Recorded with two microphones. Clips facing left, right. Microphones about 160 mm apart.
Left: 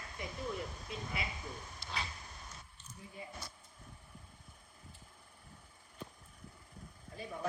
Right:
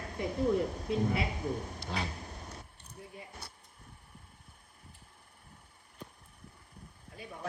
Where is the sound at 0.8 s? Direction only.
60° right (ahead or behind).